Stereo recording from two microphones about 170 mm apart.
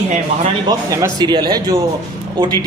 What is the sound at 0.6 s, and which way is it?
A man's voice, 20° right (ahead or behind).